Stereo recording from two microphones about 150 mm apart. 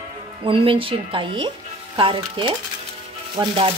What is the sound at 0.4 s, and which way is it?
Speech, 40° right (ahead or behind).